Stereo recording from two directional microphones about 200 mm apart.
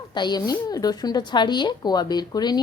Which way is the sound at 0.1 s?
20° left (ahead or behind).